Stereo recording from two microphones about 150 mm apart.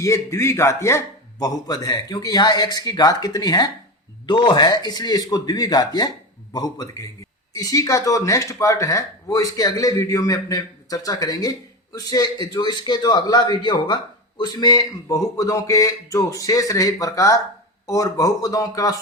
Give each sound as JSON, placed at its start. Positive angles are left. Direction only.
{"t": 0.0, "sound": "a man's voice", "side_deg": 20}